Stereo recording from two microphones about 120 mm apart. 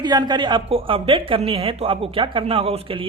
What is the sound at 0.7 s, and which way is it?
Speech, 50° right (ahead or behind).